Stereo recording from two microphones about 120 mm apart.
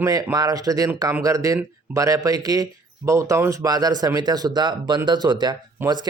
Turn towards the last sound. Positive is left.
turn(degrees=-20)  # may be behind; listen again after turning